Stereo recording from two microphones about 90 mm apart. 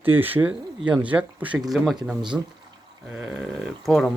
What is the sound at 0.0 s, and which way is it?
Speech, 20° right (ahead or behind).